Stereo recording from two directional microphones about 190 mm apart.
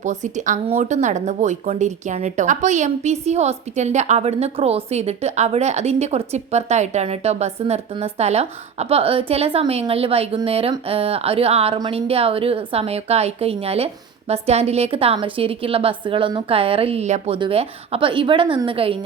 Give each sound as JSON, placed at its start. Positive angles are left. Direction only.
{"t": 0.0, "sound": "speech", "side_deg": -40}